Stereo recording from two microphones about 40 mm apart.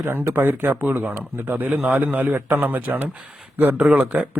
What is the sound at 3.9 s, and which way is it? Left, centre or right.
Speech, right.